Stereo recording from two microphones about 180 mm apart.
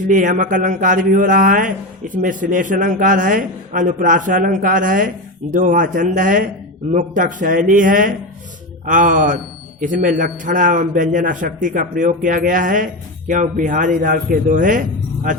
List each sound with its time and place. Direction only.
0.1 s a man's voice: 45° right (ahead or behind)